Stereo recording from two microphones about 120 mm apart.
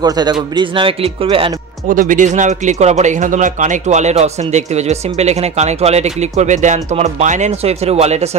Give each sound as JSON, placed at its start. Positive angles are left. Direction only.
{"t": 0.0, "sound": "speech", "side_deg": -35}
{"t": 2.0, "sound": "speech", "side_deg": -90}